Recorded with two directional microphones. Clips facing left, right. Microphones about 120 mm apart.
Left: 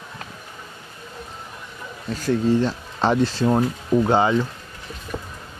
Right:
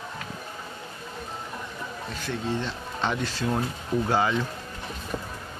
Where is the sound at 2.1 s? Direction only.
40° left (ahead or behind).